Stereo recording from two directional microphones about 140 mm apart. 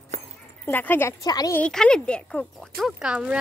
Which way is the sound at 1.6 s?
5° left (ahead or behind).